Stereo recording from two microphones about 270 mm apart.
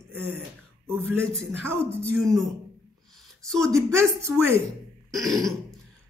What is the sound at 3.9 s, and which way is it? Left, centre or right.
Speech, centre.